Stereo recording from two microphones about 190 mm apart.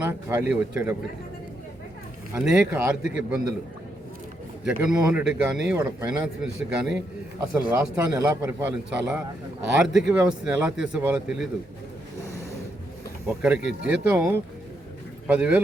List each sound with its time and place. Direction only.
0.0 s speech: 10° right (ahead or behind)
2.3 s speech: 10° right (ahead or behind)
4.6 s speech: 5° right (ahead or behind)
13.2 s speech: 5° right (ahead or behind)